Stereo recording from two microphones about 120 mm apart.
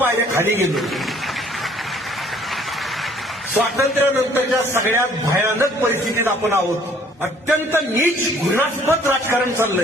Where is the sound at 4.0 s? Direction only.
20° right (ahead or behind).